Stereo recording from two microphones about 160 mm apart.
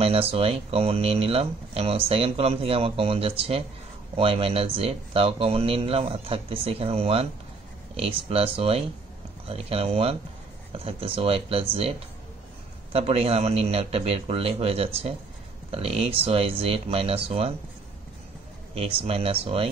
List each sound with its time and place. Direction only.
0.0 s speech: 40° right (ahead or behind)
12.9 s speech: 40° right (ahead or behind)
18.8 s speech: 35° right (ahead or behind)